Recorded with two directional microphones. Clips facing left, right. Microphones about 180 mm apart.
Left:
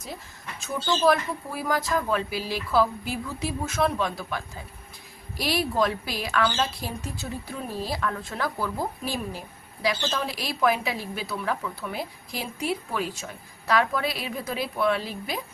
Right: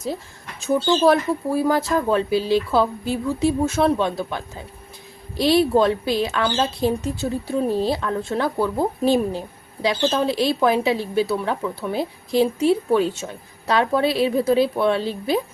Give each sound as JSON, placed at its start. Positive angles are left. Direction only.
{"t": 0.6, "sound": "speech", "side_deg": -30}